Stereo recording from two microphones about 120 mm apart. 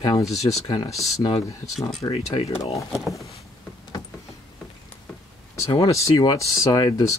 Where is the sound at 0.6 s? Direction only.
50° left (ahead or behind).